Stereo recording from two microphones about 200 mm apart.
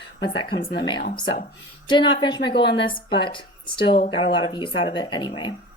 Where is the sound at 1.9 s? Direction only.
25° left (ahead or behind).